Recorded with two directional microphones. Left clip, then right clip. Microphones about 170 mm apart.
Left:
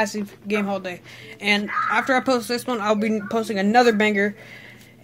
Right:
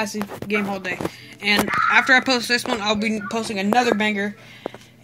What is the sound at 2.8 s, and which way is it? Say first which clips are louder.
Speech: left 1 dB; 40° left (ahead or behind).